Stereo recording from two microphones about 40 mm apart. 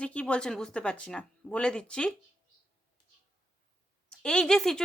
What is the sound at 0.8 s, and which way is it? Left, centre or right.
A woman's voice, left.